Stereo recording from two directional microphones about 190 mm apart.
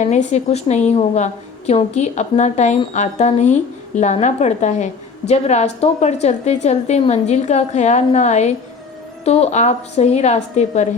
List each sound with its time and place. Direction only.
0.0 s a woman's voice: 40° left (ahead or behind)